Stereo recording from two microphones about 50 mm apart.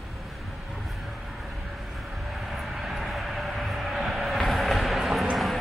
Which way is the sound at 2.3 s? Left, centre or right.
Centre.